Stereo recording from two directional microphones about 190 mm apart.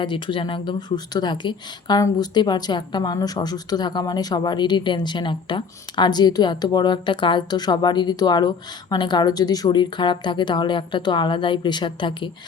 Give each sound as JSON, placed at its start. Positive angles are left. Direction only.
{"t": 0.0, "sound": "a woman's voice", "side_deg": 25}